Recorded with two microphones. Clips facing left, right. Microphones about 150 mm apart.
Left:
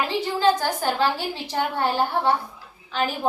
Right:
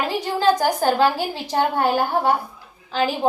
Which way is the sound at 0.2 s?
40° right (ahead or behind).